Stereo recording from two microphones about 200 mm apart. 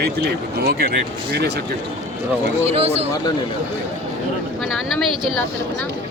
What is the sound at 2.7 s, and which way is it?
Speech, 30° right (ahead or behind).